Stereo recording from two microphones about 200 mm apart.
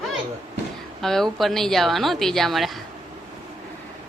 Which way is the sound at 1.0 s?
Centre (ahead or behind).